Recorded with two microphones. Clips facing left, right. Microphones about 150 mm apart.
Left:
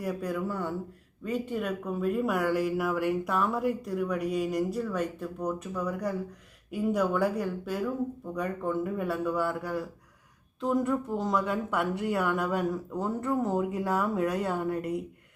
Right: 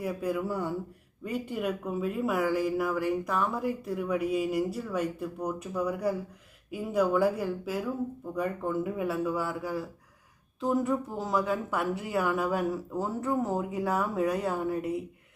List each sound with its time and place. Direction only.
0.0 s speech: 5° right (ahead or behind)